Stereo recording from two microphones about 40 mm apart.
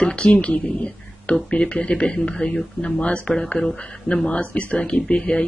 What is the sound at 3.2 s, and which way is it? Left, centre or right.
Speech, centre.